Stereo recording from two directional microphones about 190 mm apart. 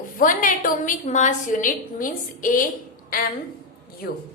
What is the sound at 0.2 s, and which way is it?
A woman's voice, 45° left (ahead or behind).